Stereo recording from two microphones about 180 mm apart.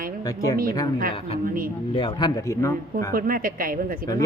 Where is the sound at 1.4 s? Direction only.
50° right (ahead or behind).